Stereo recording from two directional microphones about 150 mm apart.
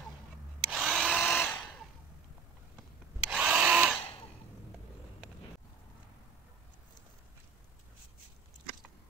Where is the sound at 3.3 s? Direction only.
5° right (ahead or behind).